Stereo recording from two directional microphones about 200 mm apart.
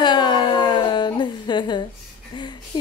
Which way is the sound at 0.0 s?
20° left (ahead or behind).